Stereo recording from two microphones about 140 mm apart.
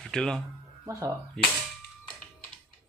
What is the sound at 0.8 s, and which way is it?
Speech, 20° right (ahead or behind).